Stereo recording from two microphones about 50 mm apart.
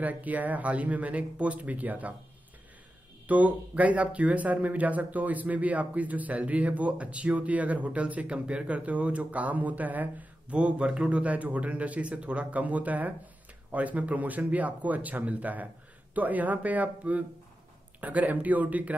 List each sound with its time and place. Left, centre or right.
0.0 s speech: right
3.3 s a man's voice: right